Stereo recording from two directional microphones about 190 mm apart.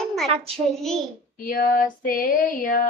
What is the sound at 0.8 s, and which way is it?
Child singing, centre (ahead or behind).